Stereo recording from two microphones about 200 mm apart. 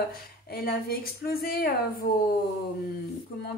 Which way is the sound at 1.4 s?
50° left (ahead or behind).